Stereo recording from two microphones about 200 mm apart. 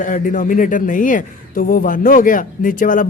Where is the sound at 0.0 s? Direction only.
40° left (ahead or behind).